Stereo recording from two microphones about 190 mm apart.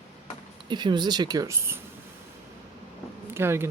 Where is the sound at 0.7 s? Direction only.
25° right (ahead or behind).